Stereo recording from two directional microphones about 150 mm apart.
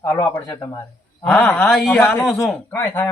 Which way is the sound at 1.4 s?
5° left (ahead or behind).